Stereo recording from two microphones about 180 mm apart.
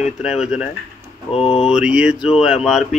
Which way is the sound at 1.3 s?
35° left (ahead or behind).